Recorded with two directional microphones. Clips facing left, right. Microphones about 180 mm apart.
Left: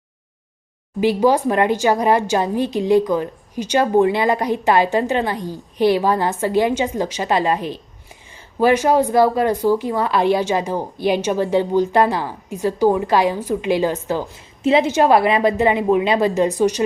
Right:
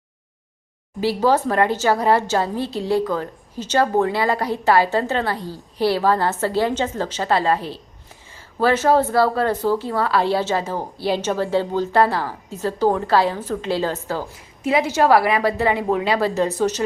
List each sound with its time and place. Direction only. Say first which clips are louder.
1.0 s a woman's voice: left 3 dB; 15° left (ahead or behind)